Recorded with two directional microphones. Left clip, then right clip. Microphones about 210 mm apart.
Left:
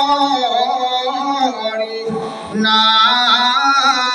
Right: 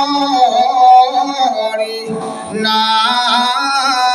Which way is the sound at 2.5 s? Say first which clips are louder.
Left 1 dB; 35° right (ahead or behind).